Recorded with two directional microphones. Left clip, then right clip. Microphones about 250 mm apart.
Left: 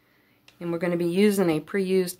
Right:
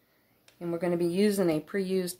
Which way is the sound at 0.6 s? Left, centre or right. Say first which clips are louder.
Left 3 dB; left.